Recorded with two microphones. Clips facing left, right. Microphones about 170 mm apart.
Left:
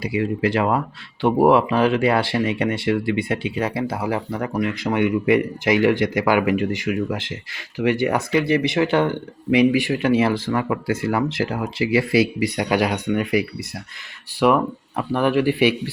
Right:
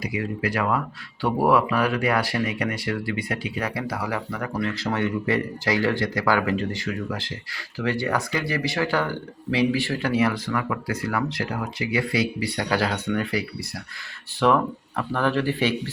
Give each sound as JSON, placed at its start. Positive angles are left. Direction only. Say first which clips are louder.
{"t": 0.0, "sound": "speech", "louder": "left 6 dB", "side_deg": 25}